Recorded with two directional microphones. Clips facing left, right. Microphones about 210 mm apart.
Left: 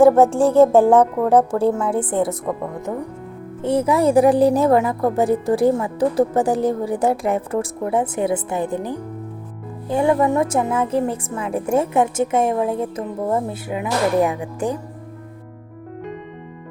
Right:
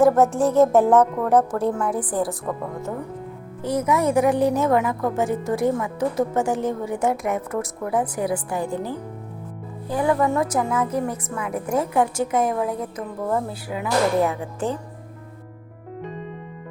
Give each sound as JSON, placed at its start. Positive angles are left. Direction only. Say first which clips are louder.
{"t": 0.0, "sound": "a woman's voice", "louder": "left 4 dB", "side_deg": 30}
{"t": 3.6, "sound": "a woman's voice", "louder": "left 4 dB", "side_deg": 30}